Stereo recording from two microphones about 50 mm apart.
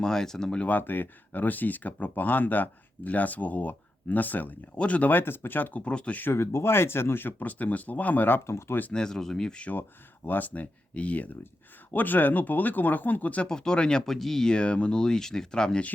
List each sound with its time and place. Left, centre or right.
0.0 s speech: centre
0.6 s speech: left
5.1 s speech: left
5.8 s speech: left
6.3 s speech: left
8.4 s speech: left
8.9 s speech: centre
10.2 s speech: left
11.9 s speech: left
13.5 s speech: centre
14.0 s speech: centre
14.5 s speech: left